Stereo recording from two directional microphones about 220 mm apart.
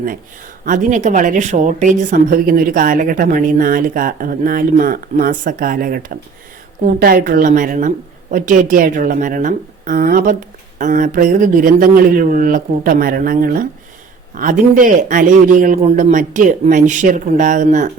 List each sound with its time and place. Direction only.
0.6 s speech: 35° right (ahead or behind)